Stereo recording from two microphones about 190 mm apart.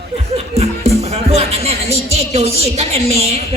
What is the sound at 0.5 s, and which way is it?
A man's voice, 35° right (ahead or behind).